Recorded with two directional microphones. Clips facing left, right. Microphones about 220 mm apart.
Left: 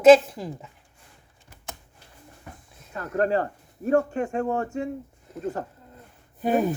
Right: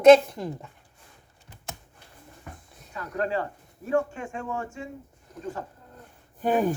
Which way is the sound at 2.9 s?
45° left (ahead or behind).